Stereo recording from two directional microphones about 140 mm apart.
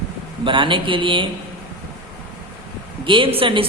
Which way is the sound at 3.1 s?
35° right (ahead or behind).